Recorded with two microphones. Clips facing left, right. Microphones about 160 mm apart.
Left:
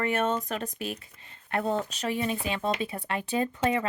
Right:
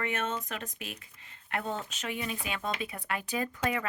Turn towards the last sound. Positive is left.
turn(degrees=25)  # may be behind; listen again after turning